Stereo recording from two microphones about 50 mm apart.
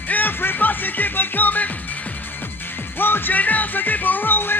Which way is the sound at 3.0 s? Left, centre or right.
Left.